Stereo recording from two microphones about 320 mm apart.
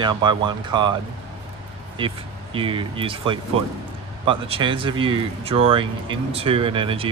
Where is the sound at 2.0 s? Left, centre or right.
Centre.